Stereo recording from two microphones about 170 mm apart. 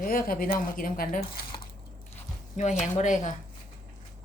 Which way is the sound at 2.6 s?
45° left (ahead or behind).